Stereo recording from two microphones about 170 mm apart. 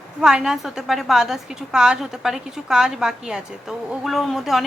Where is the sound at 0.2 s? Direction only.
5° right (ahead or behind).